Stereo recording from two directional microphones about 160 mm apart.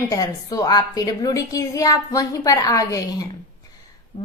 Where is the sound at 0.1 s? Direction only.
20° left (ahead or behind).